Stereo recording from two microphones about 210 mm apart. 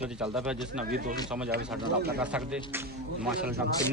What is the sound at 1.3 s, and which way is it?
A man's voice, 10° right (ahead or behind).